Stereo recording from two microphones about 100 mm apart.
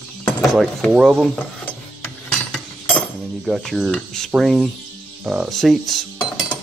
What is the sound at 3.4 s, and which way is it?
Speech, 5° right (ahead or behind).